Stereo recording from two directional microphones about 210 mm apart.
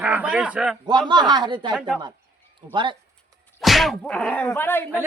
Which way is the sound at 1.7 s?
Centre (ahead or behind).